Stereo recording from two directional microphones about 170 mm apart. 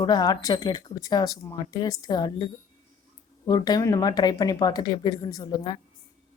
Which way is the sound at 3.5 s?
25° left (ahead or behind).